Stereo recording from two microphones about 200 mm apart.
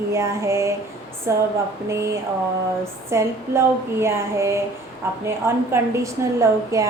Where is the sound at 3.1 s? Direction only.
15° right (ahead or behind).